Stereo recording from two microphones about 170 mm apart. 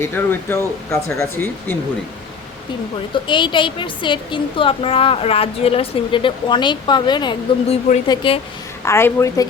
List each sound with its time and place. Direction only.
0.0 s speech: 15° left (ahead or behind)
3.2 s a woman's voice: 30° left (ahead or behind)
8.8 s speech: 15° left (ahead or behind)